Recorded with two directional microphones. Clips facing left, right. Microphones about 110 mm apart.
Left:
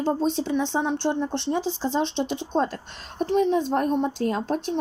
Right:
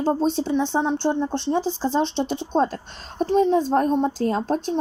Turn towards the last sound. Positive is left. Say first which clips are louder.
# right 3 dB
turn(degrees=-35)  # may be behind; listen again after turning